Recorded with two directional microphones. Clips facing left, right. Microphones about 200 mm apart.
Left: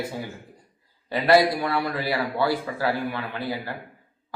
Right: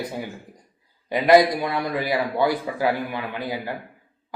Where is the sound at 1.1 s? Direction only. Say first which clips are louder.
Right 3 dB; 15° right (ahead or behind).